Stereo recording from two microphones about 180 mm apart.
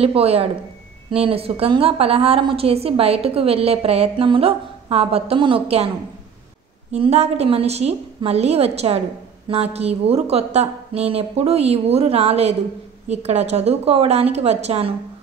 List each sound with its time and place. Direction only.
0.0 s a woman's voice: 35° right (ahead or behind)
6.9 s a woman's voice: 35° right (ahead or behind)